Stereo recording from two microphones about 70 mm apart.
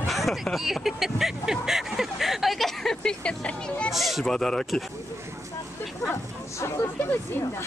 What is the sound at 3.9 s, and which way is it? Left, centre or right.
Speech, centre.